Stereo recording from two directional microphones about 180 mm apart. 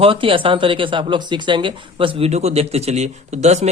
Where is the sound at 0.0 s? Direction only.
30° right (ahead or behind).